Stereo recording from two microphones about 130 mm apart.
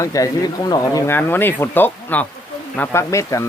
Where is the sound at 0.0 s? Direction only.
25° left (ahead or behind).